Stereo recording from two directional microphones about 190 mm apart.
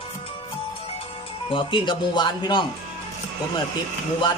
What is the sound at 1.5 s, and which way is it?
Speech, 25° left (ahead or behind).